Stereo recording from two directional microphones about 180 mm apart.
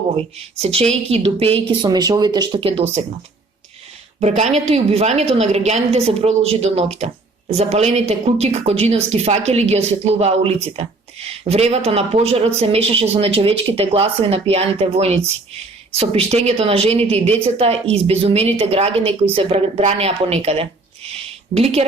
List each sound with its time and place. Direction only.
0.3 s a woman's voice: 35° right (ahead or behind)
4.2 s a woman's voice: 40° right (ahead or behind)